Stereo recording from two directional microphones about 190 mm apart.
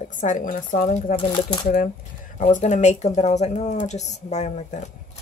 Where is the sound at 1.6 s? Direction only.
45° left (ahead or behind).